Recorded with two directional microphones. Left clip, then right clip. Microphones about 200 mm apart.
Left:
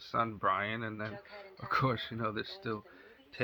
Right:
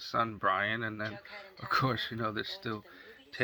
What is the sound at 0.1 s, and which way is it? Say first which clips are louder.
Speech: right 1 dB; 5° right (ahead or behind).